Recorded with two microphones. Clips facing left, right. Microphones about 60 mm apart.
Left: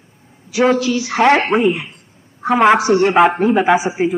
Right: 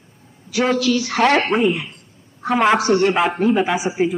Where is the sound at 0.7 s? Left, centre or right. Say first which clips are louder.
Left 2 dB; left.